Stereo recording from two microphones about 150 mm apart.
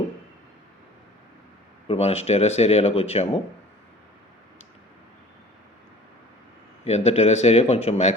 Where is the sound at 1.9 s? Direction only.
45° left (ahead or behind).